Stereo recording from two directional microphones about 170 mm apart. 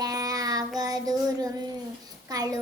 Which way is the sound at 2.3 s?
25° right (ahead or behind).